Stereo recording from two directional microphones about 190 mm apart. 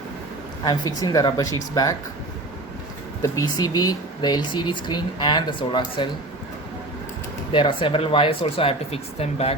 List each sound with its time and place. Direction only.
0.6 s speech: 20° left (ahead or behind)
3.2 s speech: 15° left (ahead or behind)
7.5 s speech: 25° left (ahead or behind)